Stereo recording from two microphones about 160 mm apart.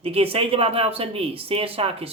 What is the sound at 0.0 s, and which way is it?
Speech, 35° right (ahead or behind).